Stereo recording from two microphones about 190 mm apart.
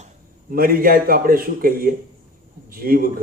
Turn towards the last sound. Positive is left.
turn(degrees=-50)  # may be behind; listen again after turning